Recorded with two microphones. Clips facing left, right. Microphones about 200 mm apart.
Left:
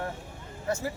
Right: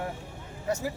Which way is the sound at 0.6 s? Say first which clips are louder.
Right 1 dB; 15° right (ahead or behind).